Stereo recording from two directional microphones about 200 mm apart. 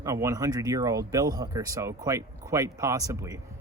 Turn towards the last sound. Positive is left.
turn(degrees=-15)  # may be behind; listen again after turning